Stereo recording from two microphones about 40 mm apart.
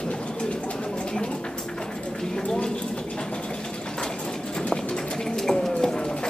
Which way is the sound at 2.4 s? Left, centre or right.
Left.